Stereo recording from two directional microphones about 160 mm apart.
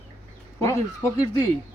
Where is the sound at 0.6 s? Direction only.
20° left (ahead or behind).